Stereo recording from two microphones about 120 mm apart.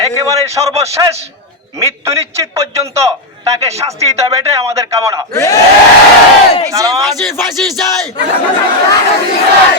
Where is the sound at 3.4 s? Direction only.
60° right (ahead or behind).